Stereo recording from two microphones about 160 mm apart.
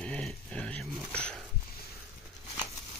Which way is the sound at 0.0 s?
5° left (ahead or behind).